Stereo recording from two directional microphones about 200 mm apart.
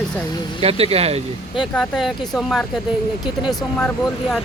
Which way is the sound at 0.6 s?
30° right (ahead or behind).